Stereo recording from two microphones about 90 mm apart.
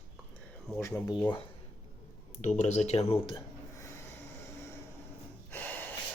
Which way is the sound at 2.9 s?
90° left.